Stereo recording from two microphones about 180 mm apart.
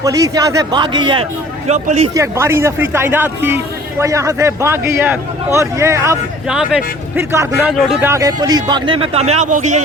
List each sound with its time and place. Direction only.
0.0 s speech: 20° right (ahead or behind)
1.6 s speech: 40° right (ahead or behind)
2.1 s speech: 15° right (ahead or behind)
6.5 s speech: 5° right (ahead or behind)
8.0 s speech: 20° right (ahead or behind); by 9.8 s 40° right (ahead or behind)